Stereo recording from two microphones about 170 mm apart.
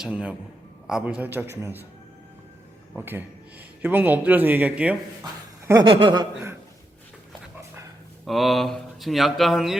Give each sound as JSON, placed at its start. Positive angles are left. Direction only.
{"t": 0.0, "sound": "speech", "side_deg": -5}
{"t": 2.9, "sound": "speech", "side_deg": -10}
{"t": 5.2, "sound": "a sound", "side_deg": -20}
{"t": 5.8, "sound": "speech", "side_deg": -30}
{"t": 8.3, "sound": "speech", "side_deg": 0}